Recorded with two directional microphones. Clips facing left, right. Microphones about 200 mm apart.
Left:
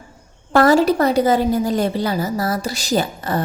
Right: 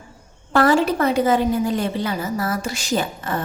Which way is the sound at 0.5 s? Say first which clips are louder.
Left 3 dB; 40° left (ahead or behind).